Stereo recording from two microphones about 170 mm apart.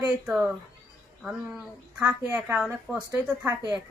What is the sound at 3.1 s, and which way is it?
Speech, 20° right (ahead or behind).